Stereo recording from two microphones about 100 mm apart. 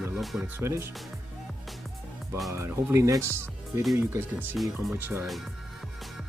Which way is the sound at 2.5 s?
25° right (ahead or behind).